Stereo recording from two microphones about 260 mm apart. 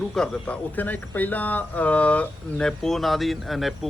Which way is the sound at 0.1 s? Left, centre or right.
Centre.